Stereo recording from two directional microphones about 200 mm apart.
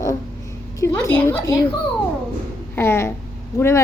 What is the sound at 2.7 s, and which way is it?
Speech, 10° left (ahead or behind).